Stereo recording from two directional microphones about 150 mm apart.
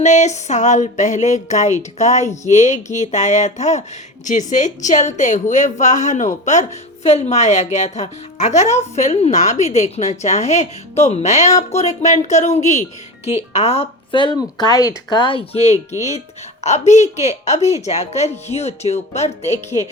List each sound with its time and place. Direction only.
0.0 s music: 50° left (ahead or behind)
4.3 s a woman's voice: 55° left (ahead or behind)
7.1 s music: 50° left (ahead or behind)
13.5 s speech: 45° left (ahead or behind)
16.6 s music: 50° left (ahead or behind)
19.7 s speech: 30° left (ahead or behind)